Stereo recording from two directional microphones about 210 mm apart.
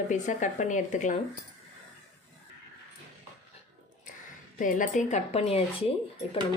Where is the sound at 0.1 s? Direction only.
35° left (ahead or behind).